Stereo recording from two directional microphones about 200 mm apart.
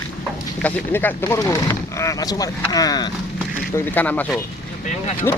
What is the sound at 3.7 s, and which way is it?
Speech, 10° left (ahead or behind).